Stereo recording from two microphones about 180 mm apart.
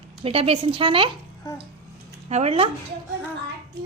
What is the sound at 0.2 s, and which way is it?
Speech, 35° right (ahead or behind).